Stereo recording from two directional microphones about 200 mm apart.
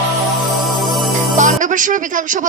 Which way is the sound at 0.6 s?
Centre (ahead or behind).